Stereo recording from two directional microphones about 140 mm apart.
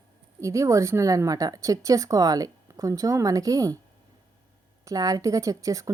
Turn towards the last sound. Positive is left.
turn(degrees=-25)  # may be behind; listen again after turning